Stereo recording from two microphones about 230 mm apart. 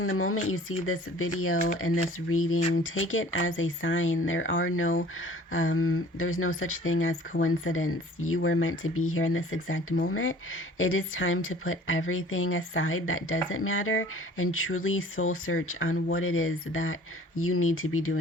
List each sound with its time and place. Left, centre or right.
0.0 s a woman's voice: left
1.5 s speech: left
2.3 s a woman's voice: left